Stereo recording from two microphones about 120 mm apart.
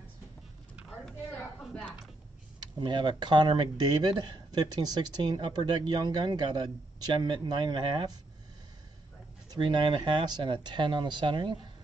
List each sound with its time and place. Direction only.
1.6 s a woman's voice: 5° left (ahead or behind)
2.6 s speech: 40° right (ahead or behind)
9.5 s speech: 40° right (ahead or behind)